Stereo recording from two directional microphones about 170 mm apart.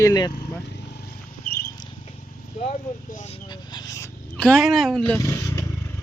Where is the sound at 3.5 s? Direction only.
25° left (ahead or behind).